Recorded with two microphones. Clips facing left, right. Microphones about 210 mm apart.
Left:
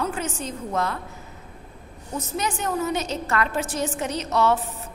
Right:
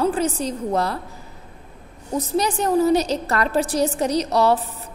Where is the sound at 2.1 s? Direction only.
35° right (ahead or behind).